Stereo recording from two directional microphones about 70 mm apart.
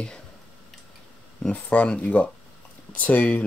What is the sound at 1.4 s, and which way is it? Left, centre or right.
Speech, centre.